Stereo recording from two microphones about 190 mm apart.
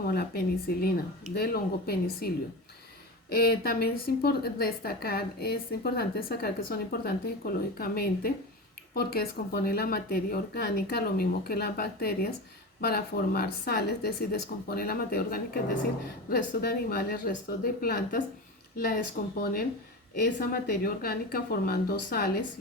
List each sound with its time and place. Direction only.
0.1 s a woman's voice: 55° left (ahead or behind)